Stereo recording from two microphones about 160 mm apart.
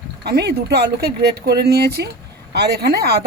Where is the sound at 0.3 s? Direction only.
85° right.